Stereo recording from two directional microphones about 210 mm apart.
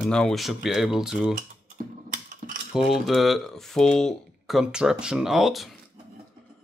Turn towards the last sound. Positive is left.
turn(degrees=0)  # may be behind; listen again after turning